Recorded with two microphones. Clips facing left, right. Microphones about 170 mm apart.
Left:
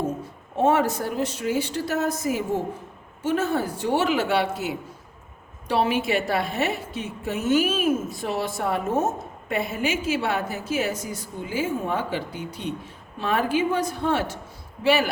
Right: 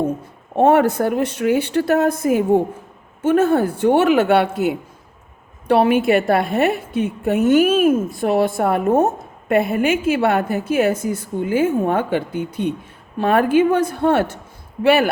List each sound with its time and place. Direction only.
0.5 s a woman's voice: 60° right (ahead or behind)